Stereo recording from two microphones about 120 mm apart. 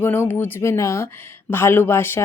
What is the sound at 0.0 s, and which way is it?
Speech, 20° left (ahead or behind).